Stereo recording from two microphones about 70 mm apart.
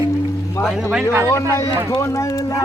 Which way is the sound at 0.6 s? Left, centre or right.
Left.